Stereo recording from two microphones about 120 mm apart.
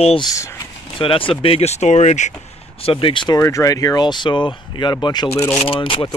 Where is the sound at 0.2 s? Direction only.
25° left (ahead or behind).